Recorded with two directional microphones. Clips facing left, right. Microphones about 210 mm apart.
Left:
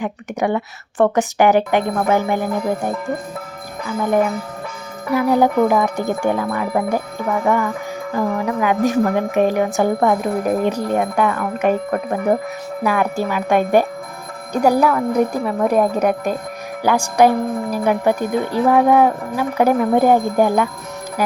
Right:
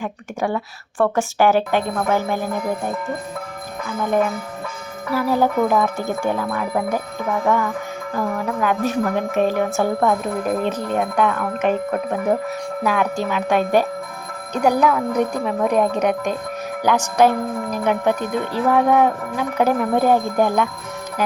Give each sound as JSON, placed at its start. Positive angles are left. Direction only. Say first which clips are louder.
{"t": 0.0, "sound": "wind chime", "louder": "left 3 dB", "side_deg": 20}
{"t": 4.0, "sound": "wind chime", "louder": "left 2 dB", "side_deg": 10}